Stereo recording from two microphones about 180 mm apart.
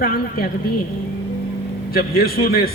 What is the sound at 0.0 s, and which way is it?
Speech, 55° left (ahead or behind).